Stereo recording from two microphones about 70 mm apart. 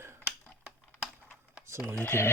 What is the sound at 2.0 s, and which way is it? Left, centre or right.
Speech, left.